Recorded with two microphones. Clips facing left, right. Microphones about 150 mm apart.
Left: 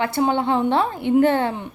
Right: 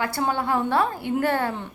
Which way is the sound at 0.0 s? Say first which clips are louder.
Left 5 dB; 20° left (ahead or behind).